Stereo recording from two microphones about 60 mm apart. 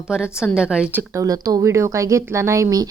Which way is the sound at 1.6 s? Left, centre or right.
Right.